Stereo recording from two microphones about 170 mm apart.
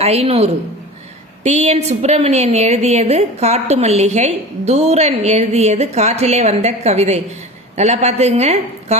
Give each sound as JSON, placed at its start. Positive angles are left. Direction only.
{"t": 0.0, "sound": "a woman's voice", "side_deg": -35}